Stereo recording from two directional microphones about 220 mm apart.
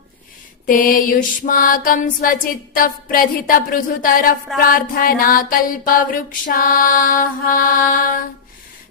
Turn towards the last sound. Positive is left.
turn(degrees=40)  # may be behind; listen again after turning